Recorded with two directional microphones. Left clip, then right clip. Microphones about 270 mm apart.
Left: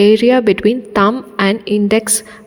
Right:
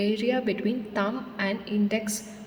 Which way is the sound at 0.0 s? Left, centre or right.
Left.